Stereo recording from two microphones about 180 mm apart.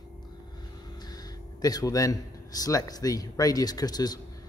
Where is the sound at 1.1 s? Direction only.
20° left (ahead or behind).